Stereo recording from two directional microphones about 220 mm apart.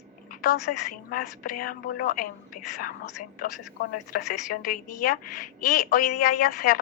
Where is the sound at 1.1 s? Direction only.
40° left (ahead or behind).